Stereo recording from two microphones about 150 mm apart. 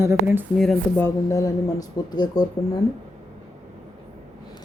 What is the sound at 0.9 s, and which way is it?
A woman's voice, 20° left (ahead or behind).